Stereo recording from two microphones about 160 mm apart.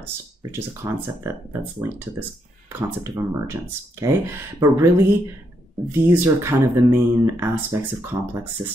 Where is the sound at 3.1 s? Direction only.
15° right (ahead or behind).